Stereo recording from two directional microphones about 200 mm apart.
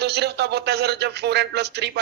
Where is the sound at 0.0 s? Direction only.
55° right (ahead or behind).